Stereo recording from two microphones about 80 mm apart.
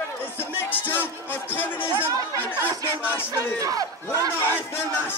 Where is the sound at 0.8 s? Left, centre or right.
Left.